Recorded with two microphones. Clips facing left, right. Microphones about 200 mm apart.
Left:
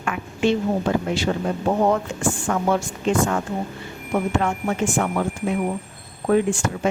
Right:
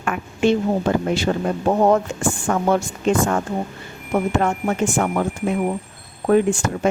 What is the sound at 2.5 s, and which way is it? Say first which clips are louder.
Speech: right 3 dB; 45° right (ahead or behind).